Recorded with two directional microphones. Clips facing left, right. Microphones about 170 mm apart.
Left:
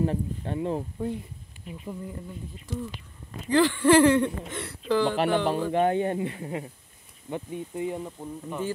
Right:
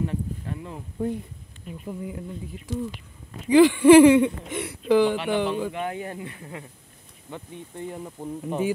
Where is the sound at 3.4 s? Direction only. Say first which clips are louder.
Right 7 dB; 15° right (ahead or behind).